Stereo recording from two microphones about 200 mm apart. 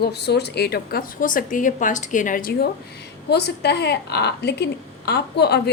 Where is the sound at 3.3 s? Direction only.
55° left (ahead or behind).